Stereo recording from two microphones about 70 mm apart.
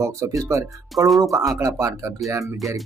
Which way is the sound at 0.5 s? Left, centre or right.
Right.